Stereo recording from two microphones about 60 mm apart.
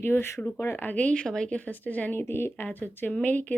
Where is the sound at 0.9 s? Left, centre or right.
Centre.